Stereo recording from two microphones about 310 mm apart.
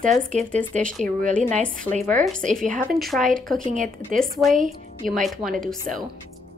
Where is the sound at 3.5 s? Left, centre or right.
Right.